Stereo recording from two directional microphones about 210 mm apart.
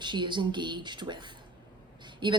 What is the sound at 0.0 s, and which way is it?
Speech, 20° right (ahead or behind).